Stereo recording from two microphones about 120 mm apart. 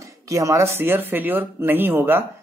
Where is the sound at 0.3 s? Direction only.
25° right (ahead or behind).